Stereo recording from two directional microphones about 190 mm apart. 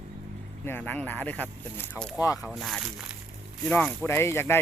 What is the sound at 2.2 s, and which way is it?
Speech, 20° left (ahead or behind).